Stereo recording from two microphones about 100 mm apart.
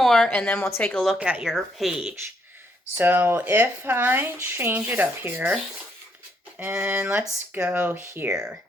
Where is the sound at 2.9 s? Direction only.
20° right (ahead or behind).